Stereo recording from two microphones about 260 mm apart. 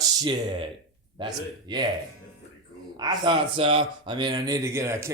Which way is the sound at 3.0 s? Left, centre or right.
Centre.